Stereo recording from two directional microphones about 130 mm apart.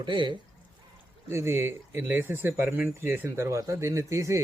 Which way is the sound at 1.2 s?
20° right (ahead or behind).